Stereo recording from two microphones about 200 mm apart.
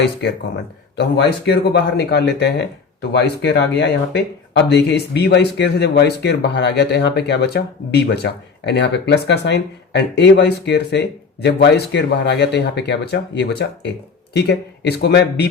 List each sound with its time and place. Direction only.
0.0 s speech: 60° left (ahead or behind)